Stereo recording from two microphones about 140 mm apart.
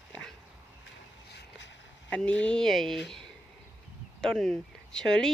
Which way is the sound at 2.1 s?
10° left (ahead or behind).